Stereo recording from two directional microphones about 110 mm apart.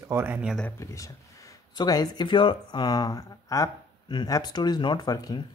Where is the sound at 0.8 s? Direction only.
30° left (ahead or behind).